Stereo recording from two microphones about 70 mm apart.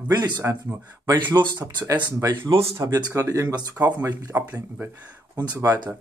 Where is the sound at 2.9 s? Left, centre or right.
Right.